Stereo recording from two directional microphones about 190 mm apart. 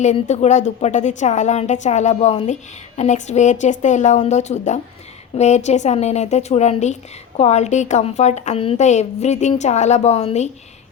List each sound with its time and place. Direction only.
0.0 s a woman's voice: 40° left (ahead or behind)